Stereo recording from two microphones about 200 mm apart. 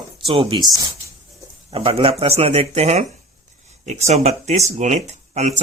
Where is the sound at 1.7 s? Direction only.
30° right (ahead or behind).